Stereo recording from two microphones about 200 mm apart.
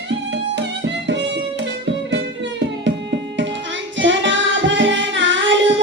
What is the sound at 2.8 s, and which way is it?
Music, 65° right (ahead or behind).